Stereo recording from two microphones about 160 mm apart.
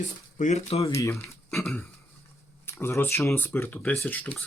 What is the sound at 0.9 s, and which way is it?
Speech, 20° left (ahead or behind).